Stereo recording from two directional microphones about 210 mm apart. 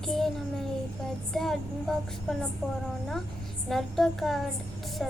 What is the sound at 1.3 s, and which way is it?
Speech, centre (ahead or behind).